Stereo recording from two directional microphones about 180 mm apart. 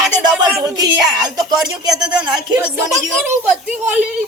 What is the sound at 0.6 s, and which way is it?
Speech, 20° right (ahead or behind).